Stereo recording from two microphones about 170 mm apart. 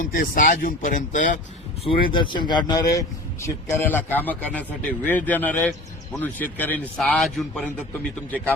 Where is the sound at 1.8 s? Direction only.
30° left (ahead or behind).